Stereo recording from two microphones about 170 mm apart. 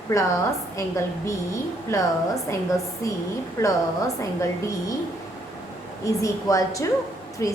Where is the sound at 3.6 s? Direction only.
20° left (ahead or behind).